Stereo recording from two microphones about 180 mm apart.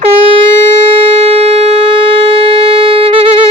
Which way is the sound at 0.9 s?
35° right (ahead or behind).